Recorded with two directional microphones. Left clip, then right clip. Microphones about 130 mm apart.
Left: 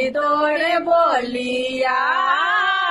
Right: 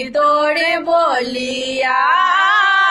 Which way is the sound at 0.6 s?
25° left (ahead or behind).